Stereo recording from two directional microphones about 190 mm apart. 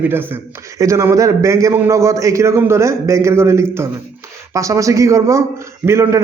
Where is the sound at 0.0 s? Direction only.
10° right (ahead or behind).